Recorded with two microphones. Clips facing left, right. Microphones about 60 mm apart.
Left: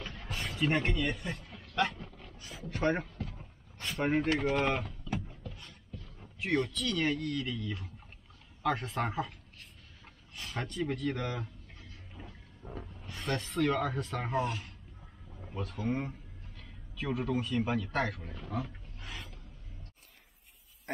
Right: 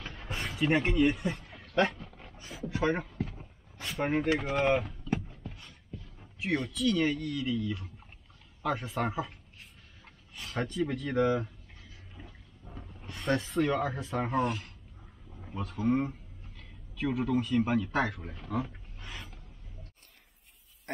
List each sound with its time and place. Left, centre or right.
0.4 s a sound: centre
1.0 s speech: centre
1.6 s vehicle: right
1.9 s speech: centre
2.1 s a sound: right
2.7 s speech: centre
3.3 s vehicle: centre
4.4 s speech: centre
10.3 s a sound: centre
11.1 s speech: centre
11.8 s wild animals: centre
12.7 s speech: centre
18.9 s a sound: centre